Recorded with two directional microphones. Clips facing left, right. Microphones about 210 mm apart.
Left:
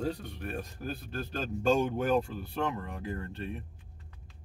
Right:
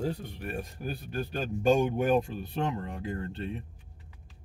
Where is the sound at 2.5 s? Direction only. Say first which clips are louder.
Right 1 dB; 30° right (ahead or behind).